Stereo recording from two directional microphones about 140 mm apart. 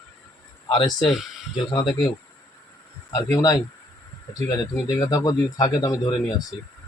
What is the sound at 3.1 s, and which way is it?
Speech, 30° left (ahead or behind).